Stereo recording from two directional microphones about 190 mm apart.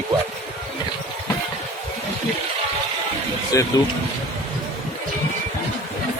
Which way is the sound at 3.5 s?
15° left (ahead or behind).